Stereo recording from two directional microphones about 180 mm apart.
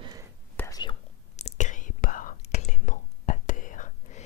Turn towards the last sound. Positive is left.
turn(degrees=45)  # may be behind; listen again after turning